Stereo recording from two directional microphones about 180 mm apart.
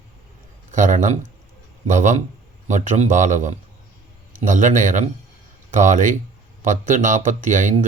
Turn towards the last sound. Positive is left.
turn(degrees=-45)  # may be behind; listen again after turning